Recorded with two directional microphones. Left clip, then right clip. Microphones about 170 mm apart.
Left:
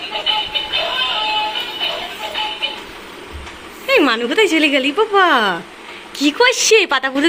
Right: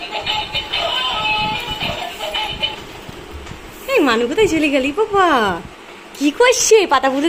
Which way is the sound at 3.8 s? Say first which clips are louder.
Left 1 dB; centre (ahead or behind).